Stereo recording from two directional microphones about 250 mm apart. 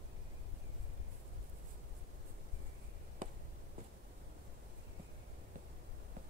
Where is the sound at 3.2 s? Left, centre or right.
Right.